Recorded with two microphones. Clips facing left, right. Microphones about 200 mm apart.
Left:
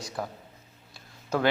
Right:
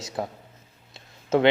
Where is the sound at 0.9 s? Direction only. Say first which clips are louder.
Right 7 dB; 25° right (ahead or behind).